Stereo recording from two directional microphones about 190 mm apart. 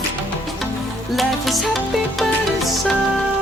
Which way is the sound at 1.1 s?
Centre (ahead or behind).